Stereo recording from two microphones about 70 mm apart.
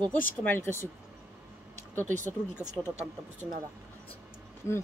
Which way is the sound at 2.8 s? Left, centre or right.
Centre.